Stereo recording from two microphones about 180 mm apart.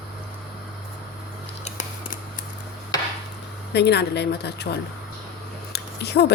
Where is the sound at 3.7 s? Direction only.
70° left (ahead or behind).